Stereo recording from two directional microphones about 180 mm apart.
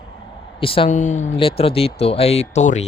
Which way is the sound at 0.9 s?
40° left (ahead or behind).